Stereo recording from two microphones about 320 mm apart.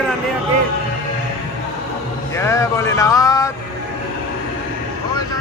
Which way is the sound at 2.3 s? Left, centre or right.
Centre.